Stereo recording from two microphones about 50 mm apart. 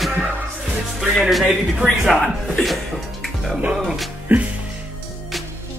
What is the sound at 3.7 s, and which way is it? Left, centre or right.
Speech, centre.